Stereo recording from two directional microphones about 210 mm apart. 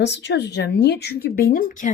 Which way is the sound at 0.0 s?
55° left (ahead or behind).